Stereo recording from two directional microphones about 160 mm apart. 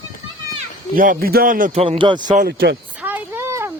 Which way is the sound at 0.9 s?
60° right (ahead or behind).